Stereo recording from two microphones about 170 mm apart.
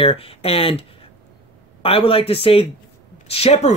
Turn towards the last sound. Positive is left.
turn(degrees=40)  # may be behind; listen again after turning